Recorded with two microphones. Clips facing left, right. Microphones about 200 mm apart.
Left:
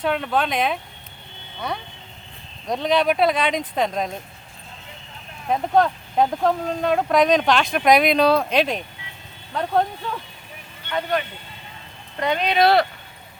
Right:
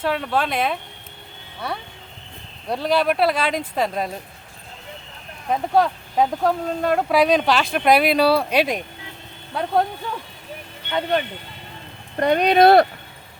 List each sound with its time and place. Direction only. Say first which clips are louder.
0.0 s speech: even; centre (ahead or behind)
5.7 s speech: even; 5° right (ahead or behind)
12.1 s speech: right 5 dB; 50° right (ahead or behind)